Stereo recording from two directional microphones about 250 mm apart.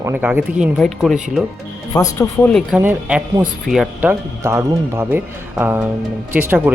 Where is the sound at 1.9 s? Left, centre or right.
Centre.